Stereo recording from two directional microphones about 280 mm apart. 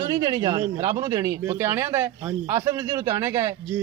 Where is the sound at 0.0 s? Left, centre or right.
Centre.